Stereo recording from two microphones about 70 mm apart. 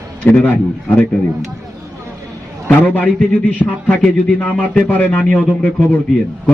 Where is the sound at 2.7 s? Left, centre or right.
Left.